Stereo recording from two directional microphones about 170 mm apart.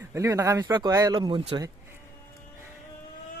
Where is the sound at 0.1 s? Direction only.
15° right (ahead or behind).